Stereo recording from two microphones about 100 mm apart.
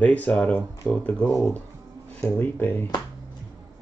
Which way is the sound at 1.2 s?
30° left (ahead or behind).